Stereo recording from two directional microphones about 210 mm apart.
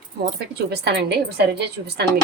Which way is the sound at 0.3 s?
50° right (ahead or behind).